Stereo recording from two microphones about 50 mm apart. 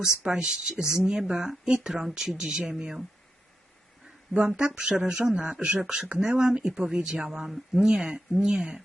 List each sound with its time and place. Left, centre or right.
0.0 s speech: centre
4.4 s speech: centre